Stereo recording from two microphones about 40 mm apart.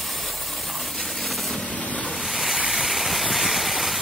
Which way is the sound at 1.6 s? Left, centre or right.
Left.